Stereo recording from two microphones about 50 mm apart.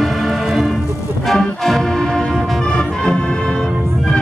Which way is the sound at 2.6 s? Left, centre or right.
Centre.